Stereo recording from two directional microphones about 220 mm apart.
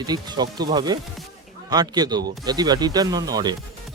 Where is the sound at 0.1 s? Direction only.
20° right (ahead or behind).